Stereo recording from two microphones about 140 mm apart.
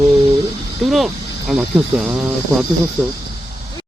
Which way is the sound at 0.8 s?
Centre (ahead or behind).